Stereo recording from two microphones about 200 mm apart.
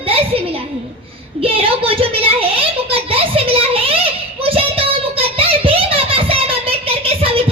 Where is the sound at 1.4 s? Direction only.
30° right (ahead or behind).